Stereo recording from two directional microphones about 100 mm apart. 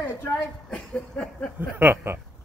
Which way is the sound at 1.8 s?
25° right (ahead or behind).